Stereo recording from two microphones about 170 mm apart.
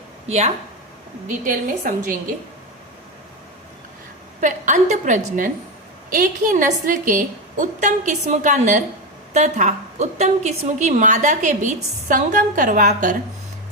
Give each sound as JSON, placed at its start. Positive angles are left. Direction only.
{"t": 1.3, "sound": "a woman's voice", "side_deg": -50}
{"t": 4.4, "sound": "a woman's voice", "side_deg": -45}